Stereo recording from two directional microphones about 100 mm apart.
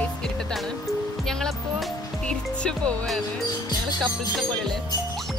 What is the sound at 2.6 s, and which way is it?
Music, 10° left (ahead or behind).